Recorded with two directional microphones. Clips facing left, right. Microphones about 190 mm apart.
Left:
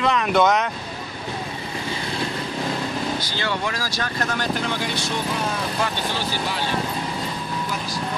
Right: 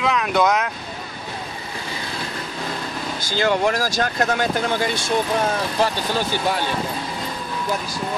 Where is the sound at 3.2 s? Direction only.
45° right (ahead or behind).